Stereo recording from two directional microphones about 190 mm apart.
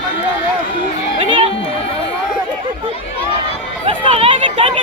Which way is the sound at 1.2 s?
30° right (ahead or behind).